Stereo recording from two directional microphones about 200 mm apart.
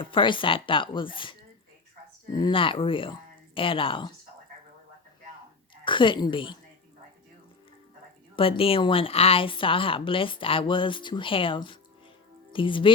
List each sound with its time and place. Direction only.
0.0 s speech: 25° left (ahead or behind)
5.8 s speech: 25° left (ahead or behind)
8.4 s speech: 25° left (ahead or behind)